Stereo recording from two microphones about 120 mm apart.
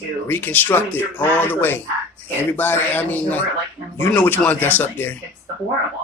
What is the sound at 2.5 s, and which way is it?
Speech, 15° left (ahead or behind).